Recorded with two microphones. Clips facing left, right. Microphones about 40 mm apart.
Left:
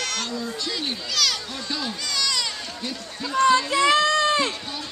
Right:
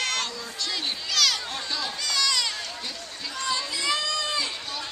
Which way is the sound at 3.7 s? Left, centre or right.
Left.